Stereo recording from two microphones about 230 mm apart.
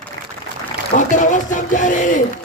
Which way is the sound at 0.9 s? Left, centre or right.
Left.